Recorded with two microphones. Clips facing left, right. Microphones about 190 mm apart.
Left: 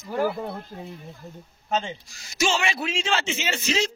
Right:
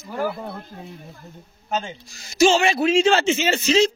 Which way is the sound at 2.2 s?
35° right (ahead or behind).